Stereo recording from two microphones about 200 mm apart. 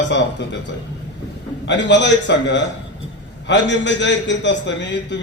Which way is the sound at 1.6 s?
60° left (ahead or behind).